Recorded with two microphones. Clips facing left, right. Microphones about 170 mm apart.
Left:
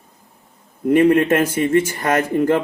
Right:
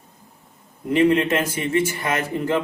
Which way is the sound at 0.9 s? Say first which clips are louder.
Left 4 dB; 55° left (ahead or behind).